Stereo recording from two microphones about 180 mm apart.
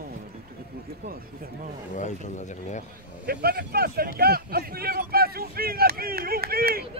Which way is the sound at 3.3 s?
60° right (ahead or behind).